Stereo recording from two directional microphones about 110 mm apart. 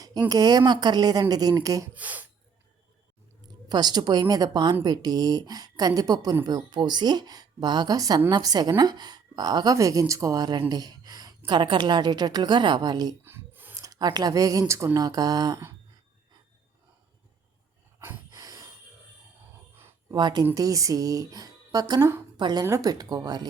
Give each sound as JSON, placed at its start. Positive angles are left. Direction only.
{"t": 0.3, "sound": "speech", "side_deg": -35}
{"t": 1.9, "sound": "speech", "side_deg": -15}
{"t": 3.7, "sound": "speech", "side_deg": -40}
{"t": 13.2, "sound": "a sound", "side_deg": -20}
{"t": 13.7, "sound": "speech", "side_deg": -30}
{"t": 18.3, "sound": "a sound", "side_deg": -35}
{"t": 20.1, "sound": "speech", "side_deg": -40}
{"t": 20.4, "sound": "a woman's voice", "side_deg": -30}
{"t": 22.6, "sound": "speech", "side_deg": -30}